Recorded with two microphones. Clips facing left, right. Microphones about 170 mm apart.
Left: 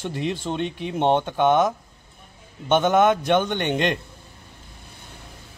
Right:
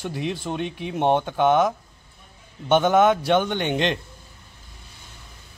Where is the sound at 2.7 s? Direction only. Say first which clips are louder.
Right 1 dB; 15° left (ahead or behind).